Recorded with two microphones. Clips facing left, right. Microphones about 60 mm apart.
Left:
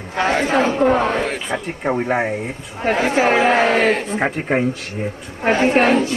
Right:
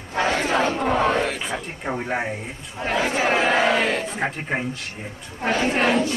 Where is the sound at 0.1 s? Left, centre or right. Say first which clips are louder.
Left 4 dB; left.